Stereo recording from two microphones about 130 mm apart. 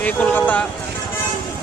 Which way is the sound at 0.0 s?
10° left (ahead or behind).